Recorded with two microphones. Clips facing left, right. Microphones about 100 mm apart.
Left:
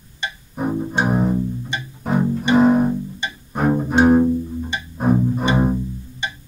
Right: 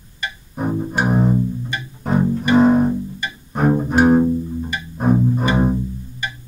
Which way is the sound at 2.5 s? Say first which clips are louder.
Right 1 dB; centre (ahead or behind).